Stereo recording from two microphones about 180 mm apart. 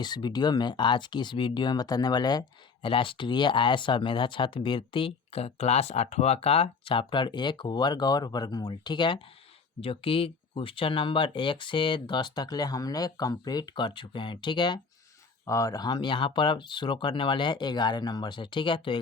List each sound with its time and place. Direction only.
0.0 s speech: 25° left (ahead or behind)